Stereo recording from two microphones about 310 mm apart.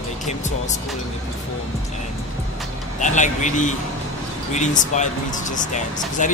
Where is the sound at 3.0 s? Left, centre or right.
Left.